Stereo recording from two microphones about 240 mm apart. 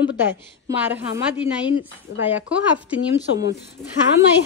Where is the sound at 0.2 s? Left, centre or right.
Centre.